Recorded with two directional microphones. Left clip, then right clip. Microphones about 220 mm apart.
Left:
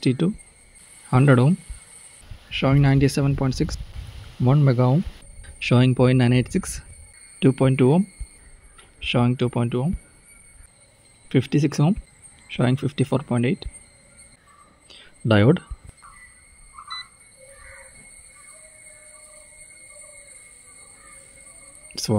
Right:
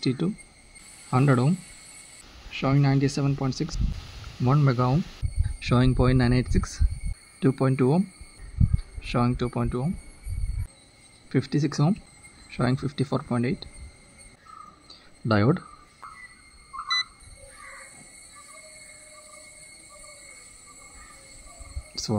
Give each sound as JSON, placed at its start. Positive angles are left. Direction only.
{"t": 0.0, "sound": "speech", "side_deg": 20}
{"t": 2.5, "sound": "speech", "side_deg": 25}
{"t": 9.0, "sound": "speech", "side_deg": 20}
{"t": 11.2, "sound": "speech", "side_deg": 25}
{"t": 14.9, "sound": "a sound", "side_deg": 20}